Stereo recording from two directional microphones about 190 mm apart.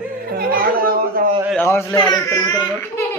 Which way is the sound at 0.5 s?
50° right (ahead or behind).